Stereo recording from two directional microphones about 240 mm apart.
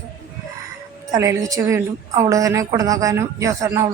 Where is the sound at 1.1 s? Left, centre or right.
Centre.